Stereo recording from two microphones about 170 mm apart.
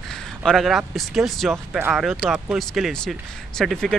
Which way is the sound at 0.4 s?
Centre (ahead or behind).